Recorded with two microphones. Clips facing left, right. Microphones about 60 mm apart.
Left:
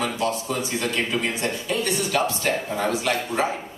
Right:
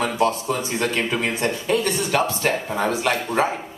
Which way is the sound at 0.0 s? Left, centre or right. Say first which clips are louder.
Right 4 dB; right.